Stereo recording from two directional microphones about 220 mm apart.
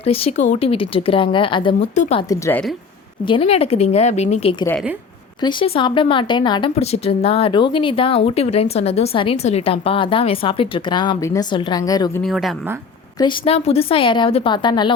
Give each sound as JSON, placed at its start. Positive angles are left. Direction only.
{"t": 0.0, "sound": "speech", "side_deg": 25}
{"t": 2.3, "sound": "a woman's voice", "side_deg": 10}
{"t": 3.2, "sound": "speech", "side_deg": 25}
{"t": 12.2, "sound": "a woman's voice", "side_deg": 0}
{"t": 13.1, "sound": "speech", "side_deg": 20}